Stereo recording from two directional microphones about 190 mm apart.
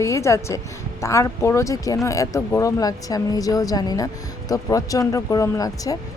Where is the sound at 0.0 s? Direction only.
15° left (ahead or behind).